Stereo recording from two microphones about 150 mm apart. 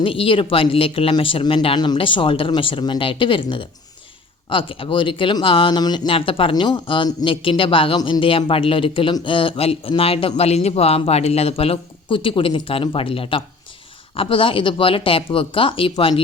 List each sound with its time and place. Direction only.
0.0 s speech: 35° left (ahead or behind)